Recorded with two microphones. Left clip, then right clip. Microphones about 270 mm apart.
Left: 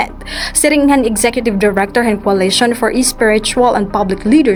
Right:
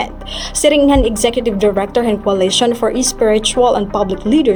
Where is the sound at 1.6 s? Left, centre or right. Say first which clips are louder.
Left 2 dB; left.